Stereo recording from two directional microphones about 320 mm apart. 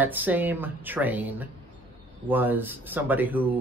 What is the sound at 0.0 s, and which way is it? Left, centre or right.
Speech, centre.